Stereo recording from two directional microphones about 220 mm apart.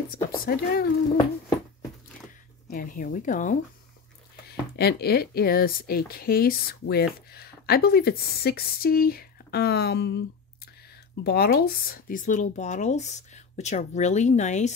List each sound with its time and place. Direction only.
0.1 s speech: 40° left (ahead or behind)
2.7 s speech: 40° left (ahead or behind)
4.7 s speech: 45° left (ahead or behind)